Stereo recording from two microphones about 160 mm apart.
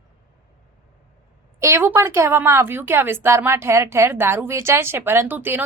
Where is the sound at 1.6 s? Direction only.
15° right (ahead or behind).